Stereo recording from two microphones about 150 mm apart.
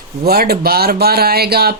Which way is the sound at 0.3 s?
90° right.